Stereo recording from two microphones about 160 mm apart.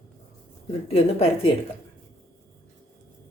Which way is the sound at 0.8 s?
40° left (ahead or behind).